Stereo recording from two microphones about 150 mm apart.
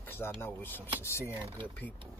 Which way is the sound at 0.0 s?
15° left (ahead or behind).